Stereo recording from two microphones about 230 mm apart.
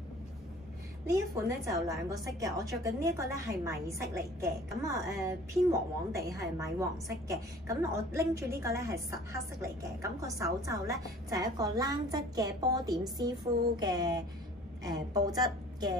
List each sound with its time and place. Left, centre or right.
1.0 s a woman's voice: centre